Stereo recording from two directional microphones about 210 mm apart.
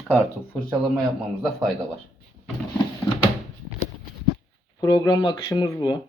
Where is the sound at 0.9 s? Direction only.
Centre (ahead or behind).